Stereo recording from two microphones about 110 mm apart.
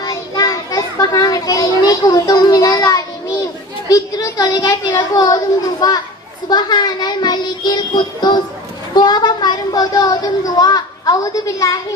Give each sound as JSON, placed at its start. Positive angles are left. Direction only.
{"t": 0.0, "sound": "children playing", "side_deg": 35}
{"t": 3.9, "sound": "a woman's voice", "side_deg": 35}